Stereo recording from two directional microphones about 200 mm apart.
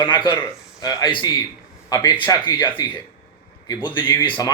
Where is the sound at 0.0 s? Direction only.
25° left (ahead or behind).